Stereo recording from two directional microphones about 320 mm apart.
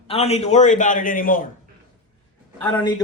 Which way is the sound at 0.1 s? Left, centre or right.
Centre.